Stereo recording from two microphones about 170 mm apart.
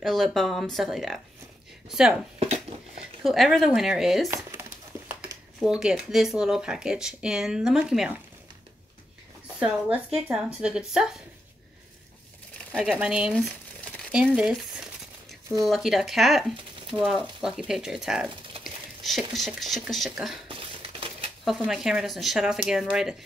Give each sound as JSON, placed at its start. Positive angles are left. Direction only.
{"t": 0.0, "sound": "speech", "side_deg": 0}
{"t": 2.3, "sound": "a sound", "side_deg": -35}
{"t": 3.3, "sound": "speech", "side_deg": 0}
{"t": 4.5, "sound": "crumpling", "side_deg": -10}
{"t": 5.6, "sound": "speech", "side_deg": -5}
{"t": 9.6, "sound": "speech", "side_deg": -5}
{"t": 12.7, "sound": "speech", "side_deg": 0}
{"t": 13.3, "sound": "crumpling", "side_deg": 5}
{"t": 15.6, "sound": "speech", "side_deg": 0}
{"t": 20.4, "sound": "crumpling", "side_deg": -30}
{"t": 21.5, "sound": "speech", "side_deg": 0}